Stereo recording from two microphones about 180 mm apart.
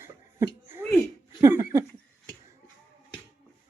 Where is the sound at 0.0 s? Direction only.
15° right (ahead or behind).